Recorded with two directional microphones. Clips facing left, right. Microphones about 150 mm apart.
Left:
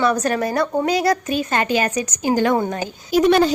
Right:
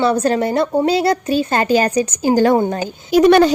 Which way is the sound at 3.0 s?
70° right (ahead or behind).